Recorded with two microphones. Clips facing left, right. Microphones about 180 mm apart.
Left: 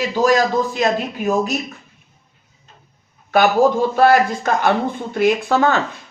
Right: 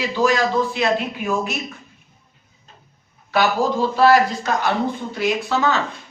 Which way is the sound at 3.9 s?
50° left (ahead or behind).